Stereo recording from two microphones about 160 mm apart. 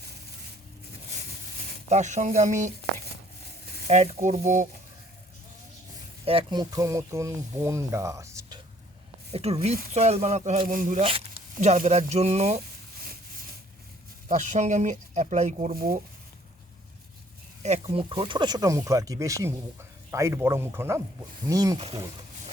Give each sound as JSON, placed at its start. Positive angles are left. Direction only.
{"t": 1.9, "sound": "speech", "side_deg": -50}
{"t": 3.8, "sound": "speech", "side_deg": -45}
{"t": 6.2, "sound": "speech", "side_deg": -30}
{"t": 9.3, "sound": "speech", "side_deg": -40}
{"t": 11.0, "sound": "speech", "side_deg": -35}
{"t": 14.3, "sound": "speech", "side_deg": -50}
{"t": 15.7, "sound": "speech", "side_deg": -65}
{"t": 17.6, "sound": "speech", "side_deg": -40}